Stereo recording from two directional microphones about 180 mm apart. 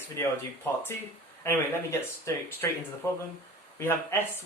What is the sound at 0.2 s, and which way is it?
Speech, 15° left (ahead or behind).